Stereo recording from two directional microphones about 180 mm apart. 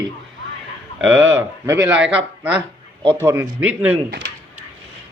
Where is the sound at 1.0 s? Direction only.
90° right.